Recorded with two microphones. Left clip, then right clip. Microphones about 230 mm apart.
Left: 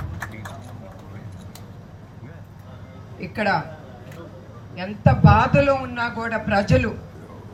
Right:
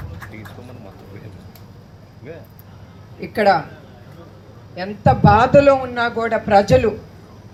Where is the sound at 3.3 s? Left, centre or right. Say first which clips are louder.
Right 7 dB; right.